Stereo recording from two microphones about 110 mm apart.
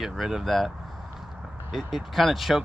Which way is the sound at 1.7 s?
Centre (ahead or behind).